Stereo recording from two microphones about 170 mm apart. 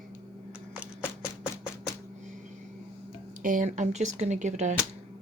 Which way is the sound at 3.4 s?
50° right (ahead or behind).